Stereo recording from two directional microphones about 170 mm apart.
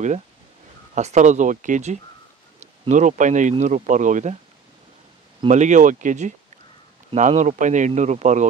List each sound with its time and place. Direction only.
0.9 s speech: 45° right (ahead or behind)
5.5 s speech: 45° right (ahead or behind)